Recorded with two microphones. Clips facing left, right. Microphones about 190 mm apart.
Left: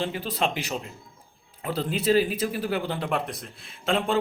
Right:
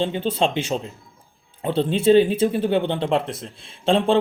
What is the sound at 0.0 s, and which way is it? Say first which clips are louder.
Speech: right 6 dB; 25° right (ahead or behind).